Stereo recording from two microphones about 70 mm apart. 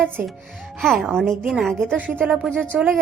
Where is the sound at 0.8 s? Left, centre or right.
Centre.